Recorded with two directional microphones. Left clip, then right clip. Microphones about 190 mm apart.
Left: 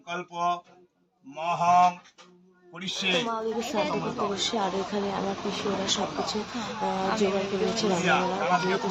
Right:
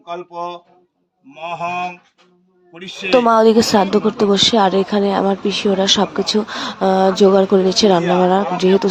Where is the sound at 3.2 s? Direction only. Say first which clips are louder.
Right 18 dB; 60° right (ahead or behind).